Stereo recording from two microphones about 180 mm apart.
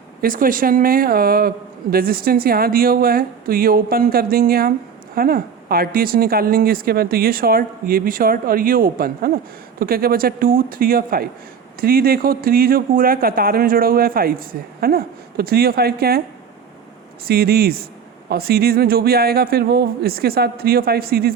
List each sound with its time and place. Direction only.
0.2 s speech: 50° right (ahead or behind)
17.2 s speech: 60° right (ahead or behind)